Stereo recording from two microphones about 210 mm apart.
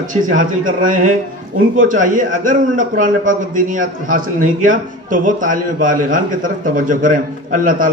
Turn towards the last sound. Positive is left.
turn(degrees=-40)  # may be behind; listen again after turning